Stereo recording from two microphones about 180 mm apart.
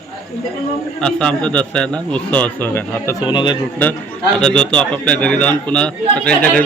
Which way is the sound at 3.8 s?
10° left (ahead or behind).